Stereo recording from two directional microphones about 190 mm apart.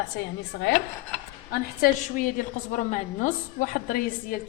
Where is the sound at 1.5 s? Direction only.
50° left (ahead or behind).